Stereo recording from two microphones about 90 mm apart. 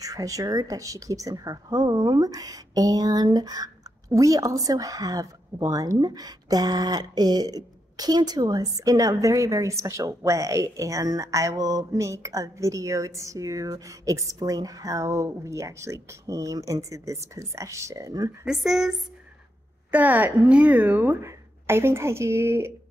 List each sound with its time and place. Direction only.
0.0 s speech: 40° right (ahead or behind)
18.4 s speech: 5° right (ahead or behind)
19.9 s a woman's voice: 20° right (ahead or behind)